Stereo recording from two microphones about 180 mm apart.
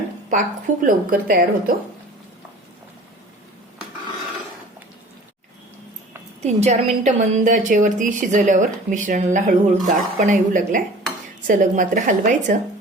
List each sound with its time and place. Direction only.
0.3 s a woman's voice: 45° right (ahead or behind)
6.4 s a woman's voice: 40° right (ahead or behind)